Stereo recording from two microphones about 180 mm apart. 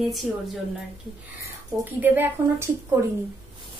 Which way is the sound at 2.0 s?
10° right (ahead or behind).